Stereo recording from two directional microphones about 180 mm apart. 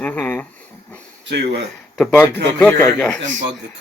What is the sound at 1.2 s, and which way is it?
Speech, 75° right (ahead or behind).